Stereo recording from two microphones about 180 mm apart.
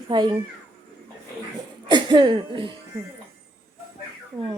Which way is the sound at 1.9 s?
25° right (ahead or behind).